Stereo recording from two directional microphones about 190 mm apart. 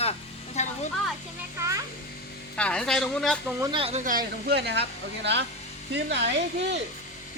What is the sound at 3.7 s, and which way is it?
Speech, 30° right (ahead or behind).